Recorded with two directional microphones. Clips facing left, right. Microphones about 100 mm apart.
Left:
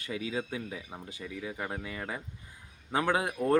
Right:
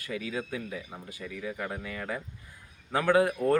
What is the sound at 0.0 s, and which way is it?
A man's voice, 25° left (ahead or behind).